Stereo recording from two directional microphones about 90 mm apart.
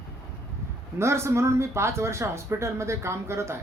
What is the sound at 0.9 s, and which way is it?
Speech, 30° right (ahead or behind).